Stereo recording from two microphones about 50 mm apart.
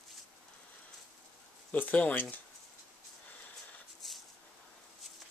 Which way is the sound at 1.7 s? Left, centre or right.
Left.